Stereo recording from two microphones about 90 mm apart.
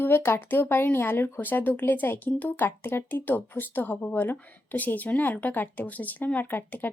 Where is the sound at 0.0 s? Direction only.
25° left (ahead or behind).